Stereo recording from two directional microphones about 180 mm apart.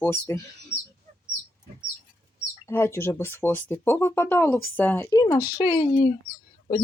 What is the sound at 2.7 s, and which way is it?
Speech, 15° left (ahead or behind).